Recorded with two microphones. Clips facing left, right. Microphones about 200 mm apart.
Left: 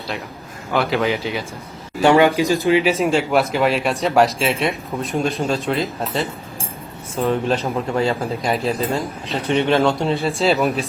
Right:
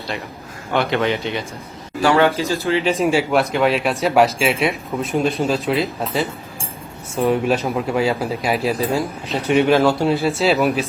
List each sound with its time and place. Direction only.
0.7 s speech: centre (ahead or behind)
2.0 s speech: 20° left (ahead or behind)
3.0 s speech: 5° right (ahead or behind)
7.2 s speech: 10° right (ahead or behind)